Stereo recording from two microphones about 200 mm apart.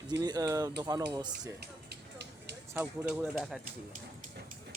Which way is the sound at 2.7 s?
10° right (ahead or behind).